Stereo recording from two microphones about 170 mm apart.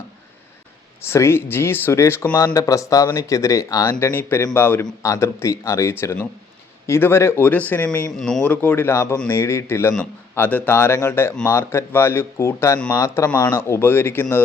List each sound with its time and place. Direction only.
1.0 s speech: 15° left (ahead or behind)